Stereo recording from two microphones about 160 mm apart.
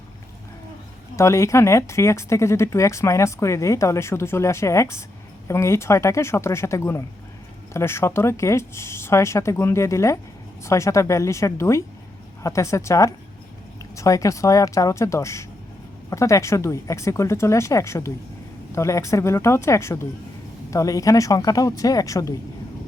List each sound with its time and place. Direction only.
1.1 s speech: 20° left (ahead or behind)